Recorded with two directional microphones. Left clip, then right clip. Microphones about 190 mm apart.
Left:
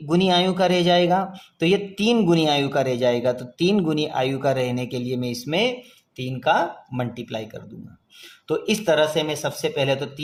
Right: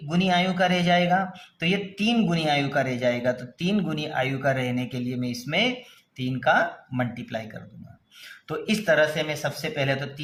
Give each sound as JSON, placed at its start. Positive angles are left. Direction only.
{"t": 0.1, "sound": "speech", "side_deg": 35}
{"t": 8.4, "sound": "speech", "side_deg": 30}